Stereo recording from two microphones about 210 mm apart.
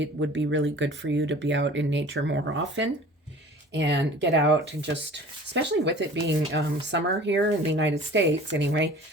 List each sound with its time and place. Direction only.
0.0 s speech: 60° right (ahead or behind)